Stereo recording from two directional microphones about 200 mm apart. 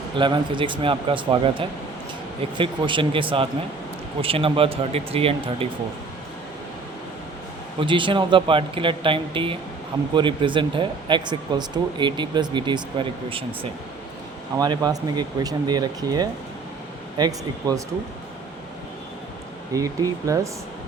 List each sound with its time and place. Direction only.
0.2 s speech: 25° right (ahead or behind)
7.8 s speech: 25° right (ahead or behind)
19.7 s speech: 15° right (ahead or behind)